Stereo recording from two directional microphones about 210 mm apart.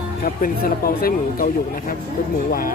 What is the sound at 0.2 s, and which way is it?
Speech, 45° left (ahead or behind).